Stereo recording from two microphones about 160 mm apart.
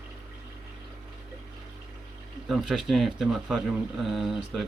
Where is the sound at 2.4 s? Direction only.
Centre (ahead or behind).